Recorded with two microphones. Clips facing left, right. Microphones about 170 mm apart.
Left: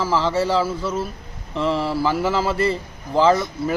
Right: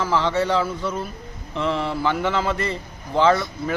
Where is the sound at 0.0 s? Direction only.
Centre (ahead or behind).